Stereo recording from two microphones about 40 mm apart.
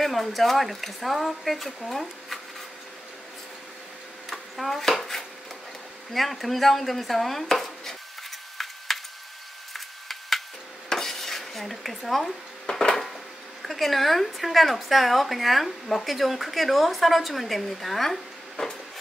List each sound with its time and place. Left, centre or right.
0.0 s a woman's voice: centre
4.3 s dishes: centre
6.1 s a woman's voice: centre
8.5 s a sound: centre
10.9 s dishes: centre
12.6 s a sound: centre
13.6 s a woman's voice: centre